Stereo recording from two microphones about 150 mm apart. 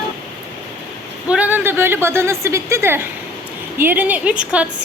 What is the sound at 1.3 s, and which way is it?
A woman's voice, 10° right (ahead or behind).